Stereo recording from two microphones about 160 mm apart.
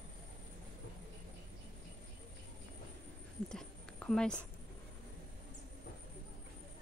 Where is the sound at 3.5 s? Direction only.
5° left (ahead or behind).